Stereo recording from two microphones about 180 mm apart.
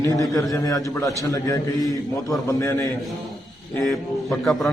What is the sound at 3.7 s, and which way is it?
Speech, centre (ahead or behind).